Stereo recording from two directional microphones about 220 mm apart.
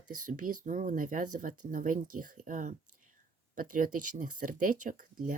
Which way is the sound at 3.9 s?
90° right.